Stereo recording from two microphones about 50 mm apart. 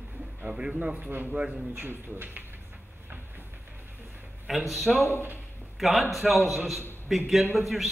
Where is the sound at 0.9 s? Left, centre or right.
Right.